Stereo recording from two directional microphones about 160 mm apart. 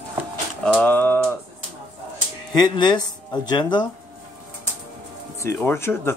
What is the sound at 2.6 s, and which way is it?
Speech, 30° left (ahead or behind).